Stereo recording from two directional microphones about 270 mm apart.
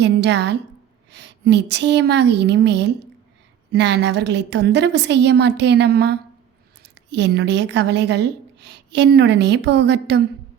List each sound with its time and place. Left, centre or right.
0.0 s a woman's voice: right